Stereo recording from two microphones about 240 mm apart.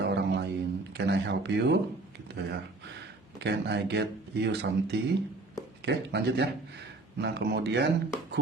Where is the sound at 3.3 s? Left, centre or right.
Right.